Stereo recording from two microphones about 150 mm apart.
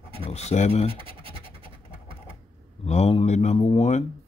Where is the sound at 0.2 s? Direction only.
45° left (ahead or behind).